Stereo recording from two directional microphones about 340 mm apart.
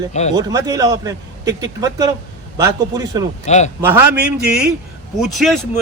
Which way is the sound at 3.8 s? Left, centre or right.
Centre.